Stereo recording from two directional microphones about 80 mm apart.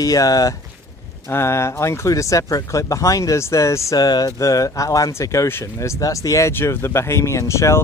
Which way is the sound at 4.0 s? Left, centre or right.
Left.